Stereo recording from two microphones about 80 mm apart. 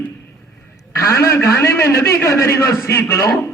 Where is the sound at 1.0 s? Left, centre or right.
Left.